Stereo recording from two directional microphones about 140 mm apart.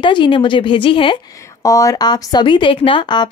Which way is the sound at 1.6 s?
25° left (ahead or behind).